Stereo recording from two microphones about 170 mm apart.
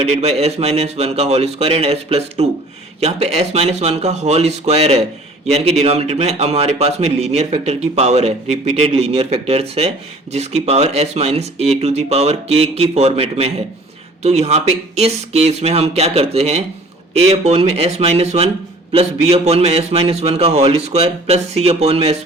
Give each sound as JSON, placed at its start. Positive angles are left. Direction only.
{"t": 0.0, "sound": "speech", "side_deg": -40}